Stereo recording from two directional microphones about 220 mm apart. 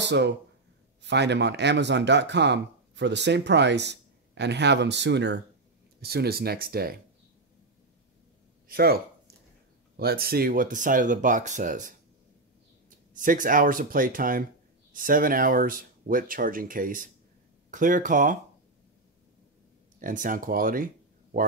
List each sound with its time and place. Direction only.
0.0 s speech: 50° right (ahead or behind)
8.6 s speech: 45° right (ahead or behind)
13.1 s speech: 35° right (ahead or behind)
20.0 s speech: 35° right (ahead or behind)